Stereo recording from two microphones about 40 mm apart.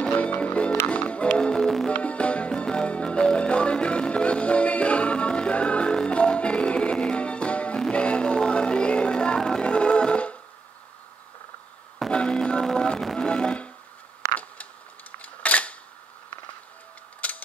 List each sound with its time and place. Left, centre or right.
0.0 s music: left
1.4 s music: centre
1.9 s music: left
12.1 s music: left
14.3 s camera: left
17.2 s mechanisms: left